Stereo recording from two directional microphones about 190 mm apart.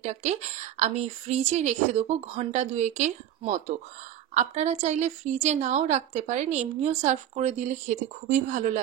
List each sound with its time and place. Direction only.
0.0 s a woman's voice: 35° right (ahead or behind)